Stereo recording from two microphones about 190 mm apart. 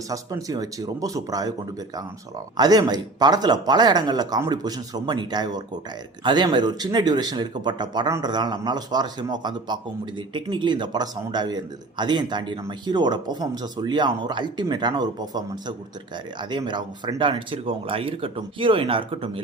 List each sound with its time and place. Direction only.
0.1 s speech: 20° right (ahead or behind)
2.6 s speech: 20° right (ahead or behind)